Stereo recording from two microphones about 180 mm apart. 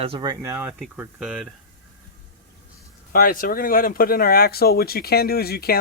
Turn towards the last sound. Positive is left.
turn(degrees=60)  # may be behind; listen again after turning